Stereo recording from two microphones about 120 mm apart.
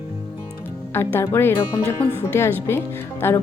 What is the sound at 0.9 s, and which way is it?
A woman's voice, 20° left (ahead or behind).